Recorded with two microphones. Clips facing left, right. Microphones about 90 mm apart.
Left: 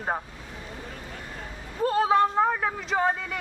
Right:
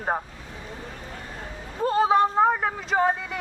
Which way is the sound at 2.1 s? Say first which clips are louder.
Right 2 dB; 15° right (ahead or behind).